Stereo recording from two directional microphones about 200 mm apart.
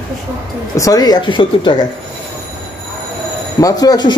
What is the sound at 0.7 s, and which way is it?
Speech, 20° left (ahead or behind).